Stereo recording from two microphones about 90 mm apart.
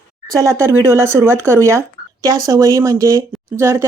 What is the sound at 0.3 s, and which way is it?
Speech, 35° right (ahead or behind).